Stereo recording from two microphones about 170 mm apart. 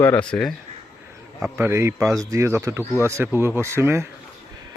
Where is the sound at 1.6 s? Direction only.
15° right (ahead or behind).